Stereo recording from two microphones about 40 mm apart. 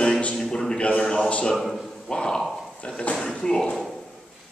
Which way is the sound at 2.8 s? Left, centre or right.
Left.